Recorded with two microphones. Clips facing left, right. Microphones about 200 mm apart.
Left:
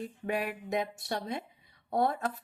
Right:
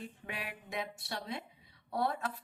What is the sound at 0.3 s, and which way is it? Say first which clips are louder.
A woman's voice: left 13 dB; 45° left (ahead or behind).